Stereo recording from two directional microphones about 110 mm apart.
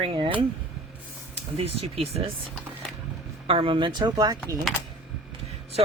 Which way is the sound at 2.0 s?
60° right (ahead or behind).